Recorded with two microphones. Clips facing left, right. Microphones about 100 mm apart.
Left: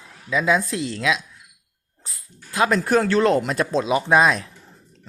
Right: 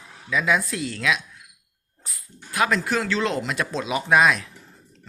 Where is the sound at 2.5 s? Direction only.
35° left (ahead or behind).